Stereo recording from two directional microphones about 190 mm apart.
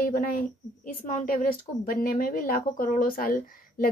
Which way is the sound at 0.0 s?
50° left (ahead or behind).